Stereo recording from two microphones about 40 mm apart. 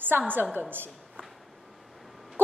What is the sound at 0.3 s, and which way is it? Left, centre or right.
Speech, right.